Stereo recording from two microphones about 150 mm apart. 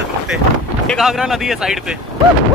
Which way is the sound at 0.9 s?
Centre (ahead or behind).